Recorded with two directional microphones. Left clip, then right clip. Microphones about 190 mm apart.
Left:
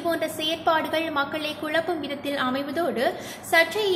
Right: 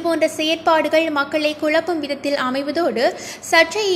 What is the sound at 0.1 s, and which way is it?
A woman's voice, 40° right (ahead or behind).